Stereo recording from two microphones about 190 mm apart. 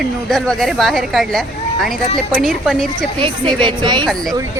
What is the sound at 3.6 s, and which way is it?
Speech, 25° right (ahead or behind).